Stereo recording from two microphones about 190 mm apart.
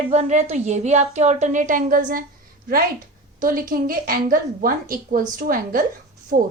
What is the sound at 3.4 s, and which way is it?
A woman's voice, 45° right (ahead or behind).